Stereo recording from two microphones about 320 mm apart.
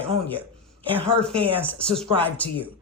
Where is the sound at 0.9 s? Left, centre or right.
Centre.